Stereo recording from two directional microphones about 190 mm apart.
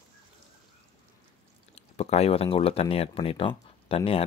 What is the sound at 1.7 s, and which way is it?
Speech, 35° left (ahead or behind).